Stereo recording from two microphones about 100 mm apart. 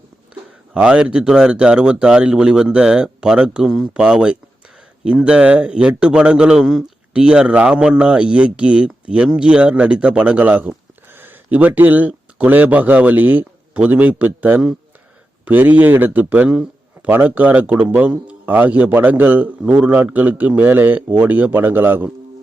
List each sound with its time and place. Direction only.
0.7 s a man's voice: 10° right (ahead or behind)